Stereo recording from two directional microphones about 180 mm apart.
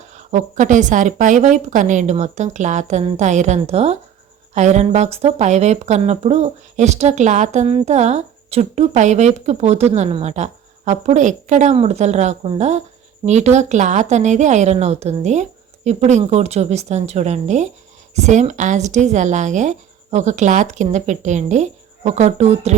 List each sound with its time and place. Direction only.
0.1 s speech: 40° right (ahead or behind)